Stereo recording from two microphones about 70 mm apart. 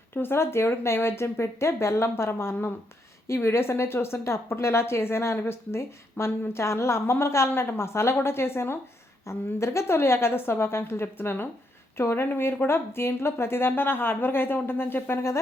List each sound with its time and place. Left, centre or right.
0.1 s speech: left